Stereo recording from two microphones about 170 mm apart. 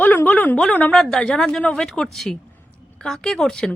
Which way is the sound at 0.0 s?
10° left (ahead or behind).